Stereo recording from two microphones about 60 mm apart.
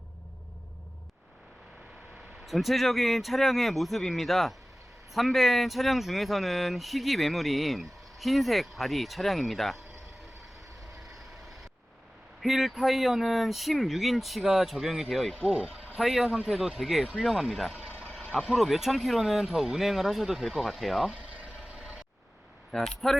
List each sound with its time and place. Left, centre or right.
2.5 s speech: centre
12.4 s speech: centre
15.5 s speech: centre
16.0 s speech: centre
21.1 s a sound: right
22.7 s speech: centre